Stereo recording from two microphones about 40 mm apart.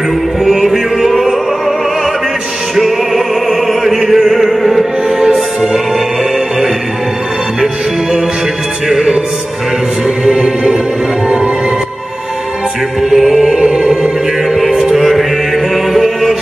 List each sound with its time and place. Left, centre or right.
0.4 s music: centre
3.4 s music: centre
8.8 s music: centre
10.2 s music: centre
13.1 s music: centre
14.5 s mantra: centre
14.8 s mantra: centre
15.7 s music: centre